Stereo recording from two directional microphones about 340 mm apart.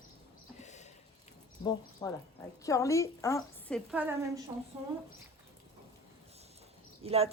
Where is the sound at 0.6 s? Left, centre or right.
Centre.